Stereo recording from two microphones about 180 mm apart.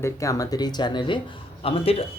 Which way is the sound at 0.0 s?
15° left (ahead or behind).